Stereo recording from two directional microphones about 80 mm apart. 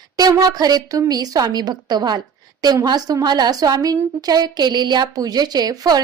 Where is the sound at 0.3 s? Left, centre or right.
Right.